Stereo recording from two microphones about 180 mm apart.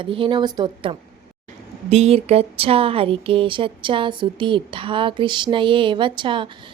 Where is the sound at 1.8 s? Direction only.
35° right (ahead or behind).